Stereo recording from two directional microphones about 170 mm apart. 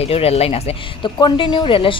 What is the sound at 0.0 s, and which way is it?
Speech, 35° left (ahead or behind).